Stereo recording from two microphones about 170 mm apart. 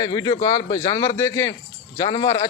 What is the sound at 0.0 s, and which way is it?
A man's voice, 25° left (ahead or behind).